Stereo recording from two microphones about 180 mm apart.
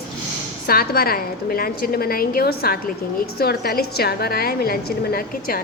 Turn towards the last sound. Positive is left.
turn(degrees=55)  # may be behind; listen again after turning